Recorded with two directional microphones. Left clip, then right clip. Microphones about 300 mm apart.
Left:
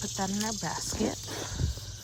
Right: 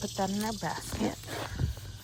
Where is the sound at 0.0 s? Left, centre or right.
Centre.